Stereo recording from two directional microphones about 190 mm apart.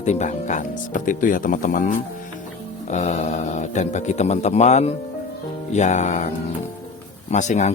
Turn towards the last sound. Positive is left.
turn(degrees=40)  # may be behind; listen again after turning